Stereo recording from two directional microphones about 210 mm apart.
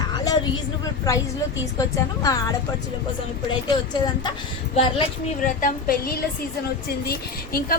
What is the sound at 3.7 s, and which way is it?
A woman's voice, 20° left (ahead or behind).